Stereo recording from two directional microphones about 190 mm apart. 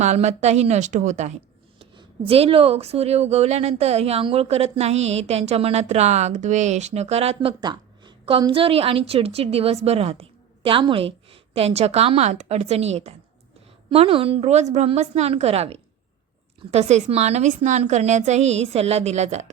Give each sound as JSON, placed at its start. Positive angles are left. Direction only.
{"t": 0.0, "sound": "speech", "side_deg": -35}